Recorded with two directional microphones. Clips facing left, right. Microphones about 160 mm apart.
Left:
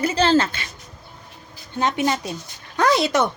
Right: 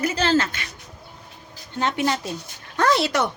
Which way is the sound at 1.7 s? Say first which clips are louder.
Left 2 dB; 15° left (ahead or behind).